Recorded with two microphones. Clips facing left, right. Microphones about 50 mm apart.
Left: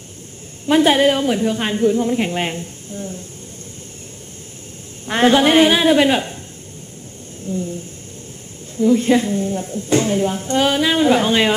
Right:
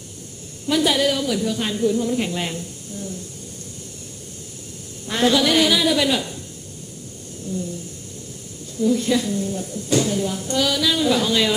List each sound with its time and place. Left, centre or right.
0.7 s a woman's voice: left
5.0 s a woman's voice: left
7.5 s a sound: left
8.7 s a woman's voice: left